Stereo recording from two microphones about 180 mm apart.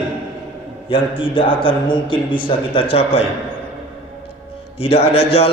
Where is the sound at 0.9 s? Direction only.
30° left (ahead or behind).